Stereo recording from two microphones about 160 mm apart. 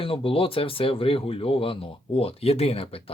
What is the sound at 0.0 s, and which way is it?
Speech, 35° left (ahead or behind).